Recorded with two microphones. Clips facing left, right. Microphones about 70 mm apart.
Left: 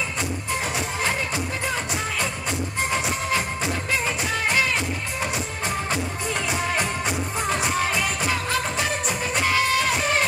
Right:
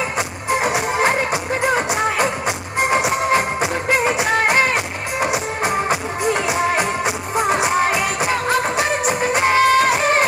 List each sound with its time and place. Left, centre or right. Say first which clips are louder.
0.5 s music: right 12 dB; right
2.0 s music: right 9 dB; right
4.3 s music: right 5 dB; right
5.3 s music: right 7 dB; right
5.9 s music: right 7 dB; centre
8.3 s music: right 6 dB; right
9.0 s music: right 8 dB; right
9.4 s music: right 8 dB; right